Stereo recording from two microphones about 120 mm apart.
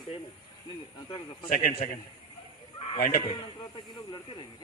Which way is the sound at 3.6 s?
40° left (ahead or behind).